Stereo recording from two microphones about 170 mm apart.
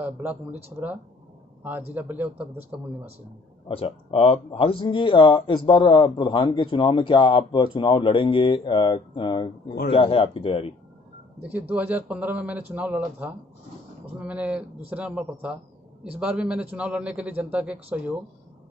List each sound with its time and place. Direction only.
0.0 s a man's voice: 10° right (ahead or behind)
3.6 s speech: 35° left (ahead or behind)
11.7 s a man's voice: 10° right (ahead or behind)